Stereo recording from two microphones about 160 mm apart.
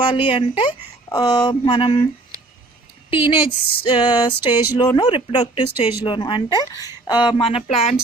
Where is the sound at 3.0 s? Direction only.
30° left (ahead or behind).